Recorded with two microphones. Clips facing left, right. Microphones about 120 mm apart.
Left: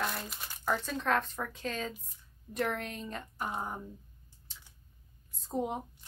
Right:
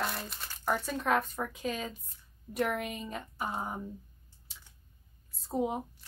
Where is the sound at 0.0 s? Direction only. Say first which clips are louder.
Even; centre (ahead or behind).